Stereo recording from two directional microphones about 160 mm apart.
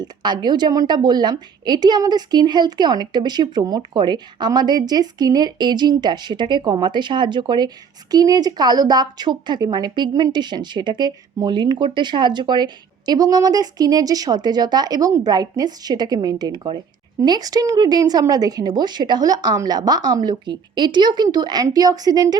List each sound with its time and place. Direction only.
0.0 s a woman's voice: 25° right (ahead or behind)